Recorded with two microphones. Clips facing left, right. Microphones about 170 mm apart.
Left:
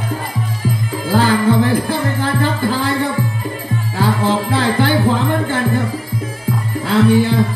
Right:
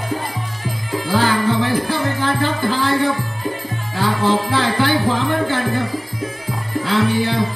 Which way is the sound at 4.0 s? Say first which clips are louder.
Left 1 dB; 50° left (ahead or behind).